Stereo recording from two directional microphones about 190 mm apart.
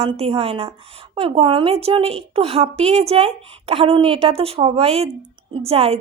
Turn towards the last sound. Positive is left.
turn(degrees=-30)  # may be behind; listen again after turning